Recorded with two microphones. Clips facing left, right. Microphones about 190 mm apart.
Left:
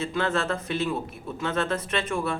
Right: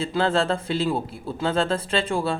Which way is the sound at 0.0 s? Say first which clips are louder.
Right 4 dB; 30° right (ahead or behind).